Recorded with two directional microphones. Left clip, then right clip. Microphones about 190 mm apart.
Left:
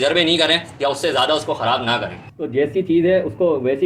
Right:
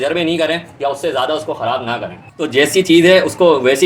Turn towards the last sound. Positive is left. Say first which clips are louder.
# right 7 dB
turn(degrees=-30)  # may be behind; listen again after turning